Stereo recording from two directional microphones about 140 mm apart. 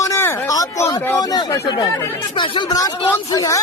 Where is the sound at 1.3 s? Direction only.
30° left (ahead or behind).